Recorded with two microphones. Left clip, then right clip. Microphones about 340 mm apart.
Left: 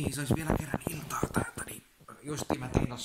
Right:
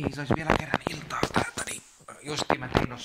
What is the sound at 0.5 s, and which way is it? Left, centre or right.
Speech, right.